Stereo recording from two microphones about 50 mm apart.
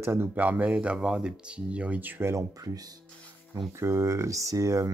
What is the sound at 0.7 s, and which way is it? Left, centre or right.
Speech, right.